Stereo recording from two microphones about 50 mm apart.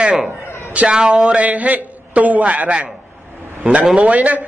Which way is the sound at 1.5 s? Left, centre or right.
Right.